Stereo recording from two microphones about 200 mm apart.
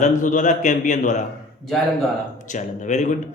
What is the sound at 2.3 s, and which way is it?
Speech, 40° left (ahead or behind).